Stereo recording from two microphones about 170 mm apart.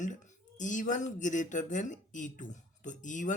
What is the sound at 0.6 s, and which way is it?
Speech, 50° left (ahead or behind).